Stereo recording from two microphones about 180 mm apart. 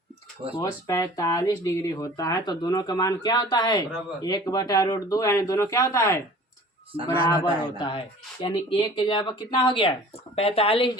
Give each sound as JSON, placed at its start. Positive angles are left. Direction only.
{"t": 0.6, "sound": "speech", "side_deg": 20}